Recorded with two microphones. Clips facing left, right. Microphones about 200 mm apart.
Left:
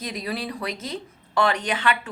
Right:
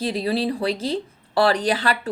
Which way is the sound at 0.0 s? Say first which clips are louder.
Right 8 dB; 30° right (ahead or behind).